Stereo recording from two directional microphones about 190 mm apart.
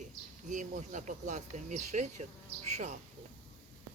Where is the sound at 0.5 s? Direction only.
40° right (ahead or behind).